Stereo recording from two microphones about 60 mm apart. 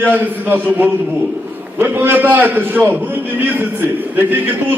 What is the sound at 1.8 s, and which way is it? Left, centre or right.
A man's voice, right.